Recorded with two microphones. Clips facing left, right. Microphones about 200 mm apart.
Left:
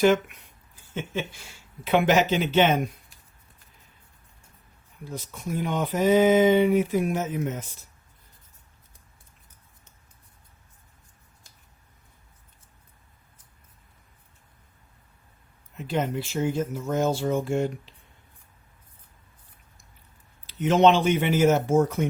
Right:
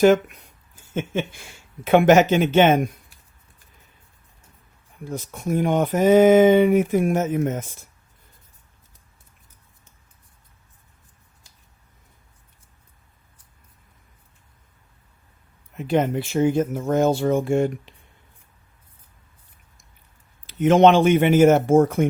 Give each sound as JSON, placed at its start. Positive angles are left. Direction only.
{"t": 0.0, "sound": "speech", "side_deg": -40}
{"t": 0.9, "sound": "speech", "side_deg": -50}
{"t": 5.0, "sound": "speech", "side_deg": -50}
{"t": 15.8, "sound": "speech", "side_deg": -55}
{"t": 20.5, "sound": "speech", "side_deg": -50}